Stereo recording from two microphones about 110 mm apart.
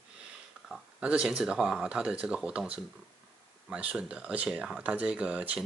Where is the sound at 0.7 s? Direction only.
5° right (ahead or behind).